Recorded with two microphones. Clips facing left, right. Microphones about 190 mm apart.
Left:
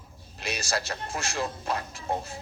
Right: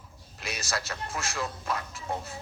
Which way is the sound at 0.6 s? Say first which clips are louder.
Left 2 dB; 35° left (ahead or behind).